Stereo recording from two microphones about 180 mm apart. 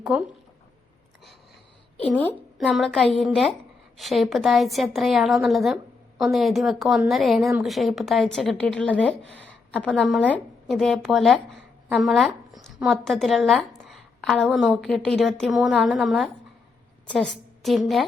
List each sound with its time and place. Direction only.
0.0 s speech: 5° right (ahead or behind)
2.0 s a woman's voice: 10° left (ahead or behind)
9.3 s a woman's voice: 90° left
9.7 s a woman's voice: 5° left (ahead or behind)